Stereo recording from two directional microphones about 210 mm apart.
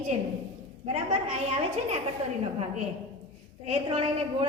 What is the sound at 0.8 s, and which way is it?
A woman's voice, 30° right (ahead or behind).